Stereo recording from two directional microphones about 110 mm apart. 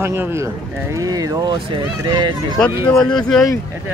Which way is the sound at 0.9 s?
35° right (ahead or behind).